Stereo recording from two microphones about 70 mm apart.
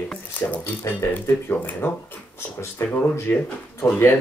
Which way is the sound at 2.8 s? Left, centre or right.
Left.